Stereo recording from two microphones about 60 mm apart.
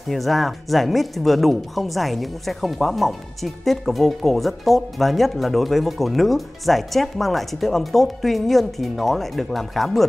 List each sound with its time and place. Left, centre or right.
0.1 s speech: centre